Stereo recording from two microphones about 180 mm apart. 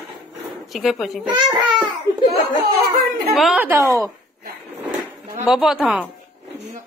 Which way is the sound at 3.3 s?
Centre (ahead or behind).